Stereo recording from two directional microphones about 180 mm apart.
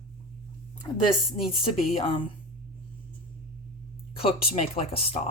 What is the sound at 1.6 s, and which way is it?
Speech, 30° left (ahead or behind).